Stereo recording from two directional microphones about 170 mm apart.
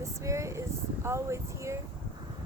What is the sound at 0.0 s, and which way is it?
Speech, 20° right (ahead or behind).